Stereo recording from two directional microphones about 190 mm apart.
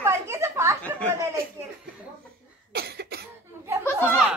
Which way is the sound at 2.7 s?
55° right (ahead or behind).